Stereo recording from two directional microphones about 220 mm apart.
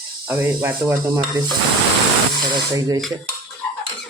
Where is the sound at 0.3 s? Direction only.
10° right (ahead or behind).